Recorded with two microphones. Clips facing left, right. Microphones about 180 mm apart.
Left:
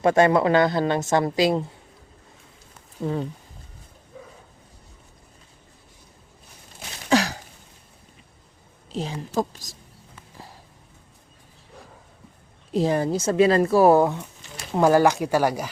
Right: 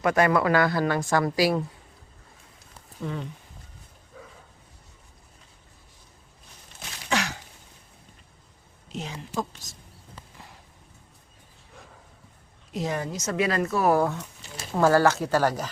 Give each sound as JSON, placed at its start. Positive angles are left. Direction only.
{"t": 0.0, "sound": "speech", "side_deg": 25}
{"t": 3.0, "sound": "speech", "side_deg": 35}
{"t": 7.1, "sound": "throat clearing", "side_deg": 35}
{"t": 8.9, "sound": "speech", "side_deg": 30}
{"t": 12.7, "sound": "speech", "side_deg": 30}